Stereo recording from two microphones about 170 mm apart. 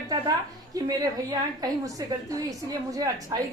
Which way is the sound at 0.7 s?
20° right (ahead or behind).